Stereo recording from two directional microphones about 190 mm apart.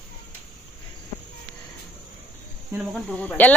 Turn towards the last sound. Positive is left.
turn(degrees=10)  # may be behind; listen again after turning